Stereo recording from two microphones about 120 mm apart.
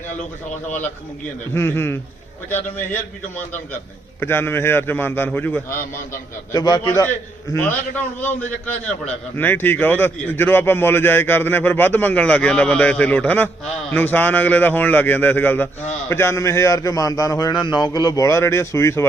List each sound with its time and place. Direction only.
1.5 s a man's voice: 20° left (ahead or behind)
6.5 s a man's voice: 35° left (ahead or behind)
7.5 s a man's voice: 15° left (ahead or behind)
9.3 s a man's voice: 15° left (ahead or behind)